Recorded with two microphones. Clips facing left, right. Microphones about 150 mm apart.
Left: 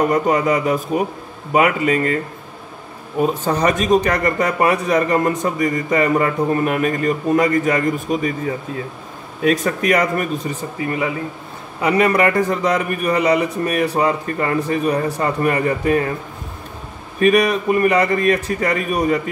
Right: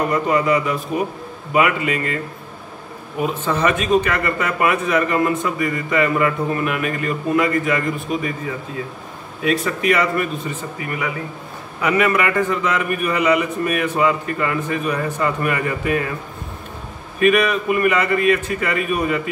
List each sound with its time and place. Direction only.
0.1 s speech: 45° left (ahead or behind)
3.3 s speech: 40° left (ahead or behind)
9.4 s speech: 45° left (ahead or behind)
10.8 s speech: 25° left (ahead or behind)
17.2 s speech: 35° left (ahead or behind)